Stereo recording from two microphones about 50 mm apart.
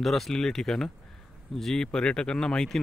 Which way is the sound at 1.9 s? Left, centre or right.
Centre.